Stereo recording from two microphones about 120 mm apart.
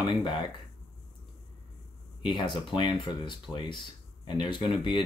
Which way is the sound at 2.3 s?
40° left (ahead or behind).